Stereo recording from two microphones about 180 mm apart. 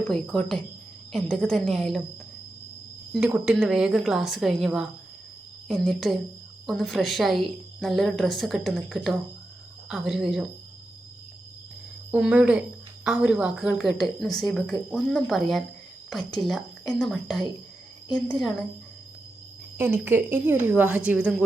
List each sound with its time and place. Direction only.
0.1 s speech: 5° left (ahead or behind)
3.1 s speech: 5° right (ahead or behind)
12.1 s a woman's voice: 5° right (ahead or behind)
19.7 s a woman's voice: 10° right (ahead or behind)